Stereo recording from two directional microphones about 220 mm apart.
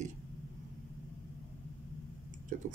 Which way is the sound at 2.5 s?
35° right (ahead or behind).